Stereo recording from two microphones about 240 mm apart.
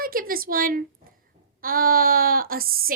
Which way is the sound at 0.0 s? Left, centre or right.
Right.